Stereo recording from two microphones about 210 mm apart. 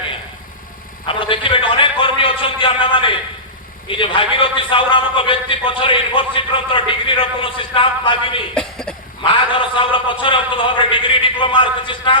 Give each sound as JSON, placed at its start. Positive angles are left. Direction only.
{"t": 1.0, "sound": "a sound", "side_deg": 25}
{"t": 3.8, "sound": "a man's voice", "side_deg": 25}
{"t": 8.5, "sound": "cough", "side_deg": 5}
{"t": 9.2, "sound": "a man's voice", "side_deg": 25}